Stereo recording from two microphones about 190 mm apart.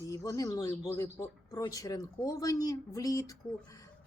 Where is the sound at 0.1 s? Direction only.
20° left (ahead or behind).